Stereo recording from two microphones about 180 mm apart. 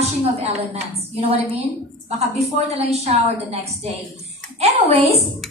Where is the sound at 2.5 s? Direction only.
35° right (ahead or behind).